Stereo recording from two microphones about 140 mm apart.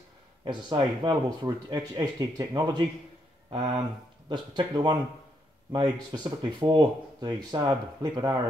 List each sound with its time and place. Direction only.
0.5 s speech: 30° right (ahead or behind)